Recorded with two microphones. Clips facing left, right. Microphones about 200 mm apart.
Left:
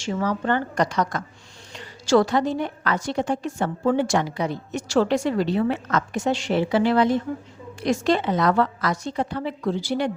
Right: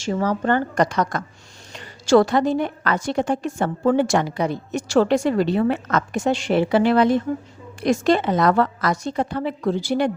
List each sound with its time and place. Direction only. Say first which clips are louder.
0.0 s a woman's voice: right 3 dB; 40° right (ahead or behind)